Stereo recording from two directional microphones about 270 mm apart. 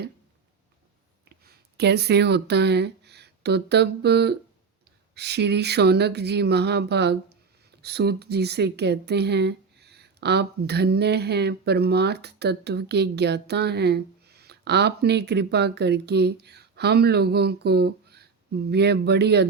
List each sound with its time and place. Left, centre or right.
1.5 s speech: right